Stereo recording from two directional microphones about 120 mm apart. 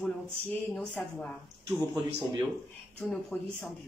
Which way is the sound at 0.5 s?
10° left (ahead or behind).